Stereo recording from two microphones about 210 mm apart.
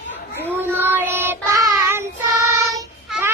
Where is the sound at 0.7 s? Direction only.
10° right (ahead or behind).